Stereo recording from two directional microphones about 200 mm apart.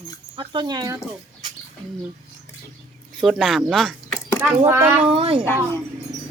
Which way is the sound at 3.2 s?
Centre (ahead or behind).